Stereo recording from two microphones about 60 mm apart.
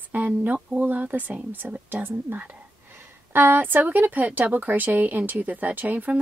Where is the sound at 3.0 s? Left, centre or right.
Right.